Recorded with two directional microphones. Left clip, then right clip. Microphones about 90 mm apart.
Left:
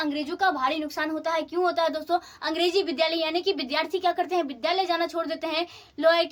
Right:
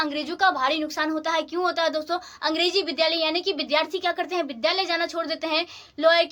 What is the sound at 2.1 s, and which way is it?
A woman's voice, centre (ahead or behind).